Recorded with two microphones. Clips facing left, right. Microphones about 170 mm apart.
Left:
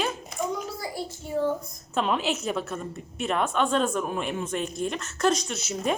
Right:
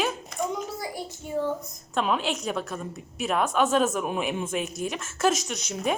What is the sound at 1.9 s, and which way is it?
Speech, centre (ahead or behind).